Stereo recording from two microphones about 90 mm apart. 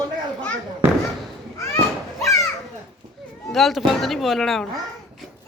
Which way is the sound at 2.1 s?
35° left (ahead or behind).